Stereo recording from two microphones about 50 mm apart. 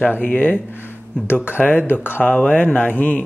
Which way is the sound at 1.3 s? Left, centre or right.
Left.